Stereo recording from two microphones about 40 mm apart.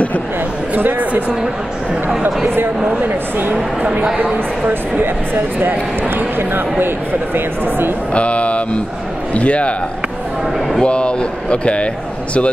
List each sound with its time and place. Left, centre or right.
0.7 s speech: right
2.2 s speech: right
4.2 s speech: right
5.0 s speech: right
8.1 s a man's voice: left
10.8 s speech: left